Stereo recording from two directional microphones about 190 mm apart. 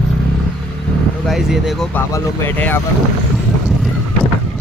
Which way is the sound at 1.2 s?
Centre (ahead or behind).